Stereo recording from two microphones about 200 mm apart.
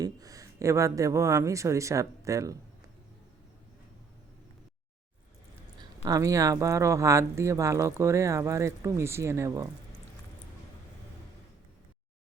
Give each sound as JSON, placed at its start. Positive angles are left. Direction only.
{"t": 0.0, "sound": "speech", "side_deg": -15}
{"t": 6.0, "sound": "speech", "side_deg": -15}